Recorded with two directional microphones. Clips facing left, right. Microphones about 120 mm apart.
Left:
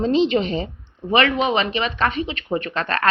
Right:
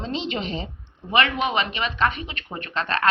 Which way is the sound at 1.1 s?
30° left (ahead or behind).